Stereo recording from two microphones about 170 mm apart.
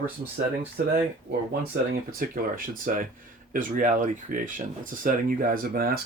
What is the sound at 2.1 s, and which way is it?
Speech, 55° right (ahead or behind).